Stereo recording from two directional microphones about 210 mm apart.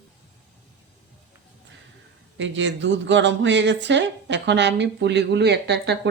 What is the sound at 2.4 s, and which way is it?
Speech, 60° right (ahead or behind).